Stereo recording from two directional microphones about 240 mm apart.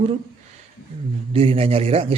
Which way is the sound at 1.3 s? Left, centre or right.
Right.